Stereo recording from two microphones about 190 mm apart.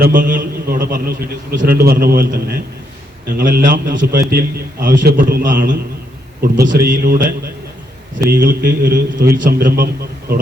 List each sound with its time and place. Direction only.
0.0 s a man's voice: 45° right (ahead or behind)